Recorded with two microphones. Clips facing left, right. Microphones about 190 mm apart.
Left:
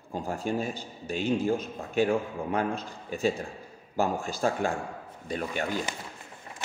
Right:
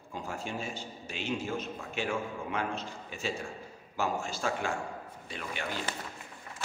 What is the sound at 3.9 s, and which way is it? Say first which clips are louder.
A man's voice: left 4 dB; 35° left (ahead or behind).